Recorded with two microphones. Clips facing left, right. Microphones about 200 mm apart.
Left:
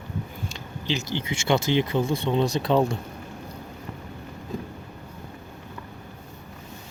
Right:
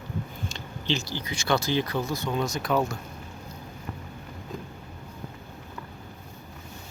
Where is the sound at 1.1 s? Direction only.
25° left (ahead or behind).